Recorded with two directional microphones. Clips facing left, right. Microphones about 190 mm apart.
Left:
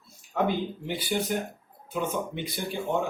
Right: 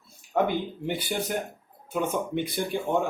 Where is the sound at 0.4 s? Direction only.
55° right (ahead or behind).